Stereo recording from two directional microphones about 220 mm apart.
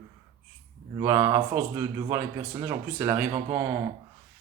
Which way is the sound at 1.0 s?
15° right (ahead or behind).